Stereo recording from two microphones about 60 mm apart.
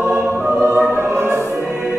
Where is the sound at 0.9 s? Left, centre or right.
Right.